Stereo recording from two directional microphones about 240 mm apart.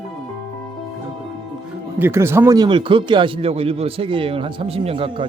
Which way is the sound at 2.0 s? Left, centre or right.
Centre.